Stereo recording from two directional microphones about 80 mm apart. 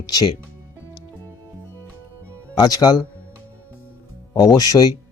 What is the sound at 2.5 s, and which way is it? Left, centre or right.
Speech, left.